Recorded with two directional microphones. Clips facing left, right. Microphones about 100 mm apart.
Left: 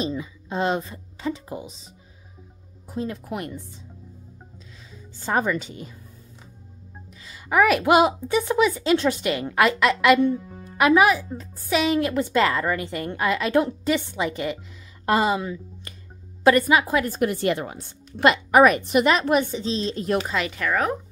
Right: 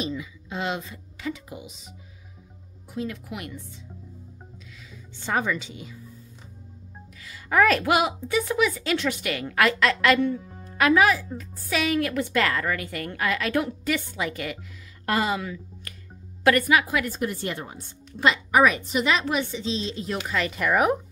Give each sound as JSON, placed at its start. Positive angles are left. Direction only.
{"t": 0.0, "sound": "speech", "side_deg": 35}
{"t": 2.9, "sound": "speech", "side_deg": 35}
{"t": 7.2, "sound": "music", "side_deg": 20}
{"t": 7.8, "sound": "a woman's voice", "side_deg": 25}
{"t": 17.2, "sound": "a woman's voice", "side_deg": 70}
{"t": 20.5, "sound": "speech", "side_deg": -10}